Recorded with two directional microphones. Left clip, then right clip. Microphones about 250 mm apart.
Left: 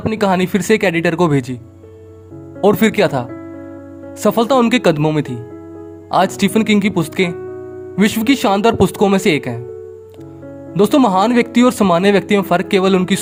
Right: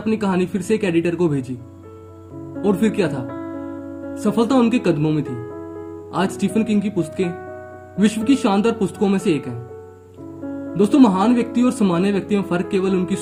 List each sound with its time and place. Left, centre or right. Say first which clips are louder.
0.1 s speech: left 5 dB; left
2.6 s speech: left 7 dB; left
10.8 s speech: left 4 dB; left